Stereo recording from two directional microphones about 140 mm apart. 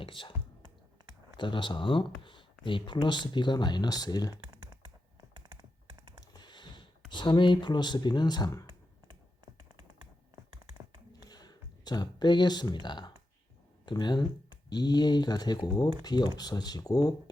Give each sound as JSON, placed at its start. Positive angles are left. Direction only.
{"t": 0.0, "sound": "speech", "side_deg": 35}
{"t": 1.4, "sound": "speech", "side_deg": 35}
{"t": 6.3, "sound": "a sound", "side_deg": 30}
{"t": 7.1, "sound": "speech", "side_deg": 35}
{"t": 11.1, "sound": "a sound", "side_deg": 30}
{"t": 13.8, "sound": "speech", "side_deg": 30}